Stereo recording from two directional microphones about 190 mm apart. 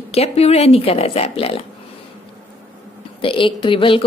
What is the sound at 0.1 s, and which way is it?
Speech, 35° left (ahead or behind).